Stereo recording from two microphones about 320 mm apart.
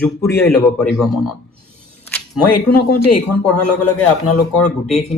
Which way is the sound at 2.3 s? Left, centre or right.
Left.